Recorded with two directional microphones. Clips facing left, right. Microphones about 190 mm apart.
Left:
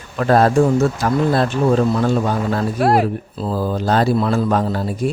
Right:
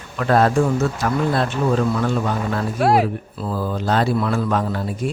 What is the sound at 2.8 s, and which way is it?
Speech, centre (ahead or behind).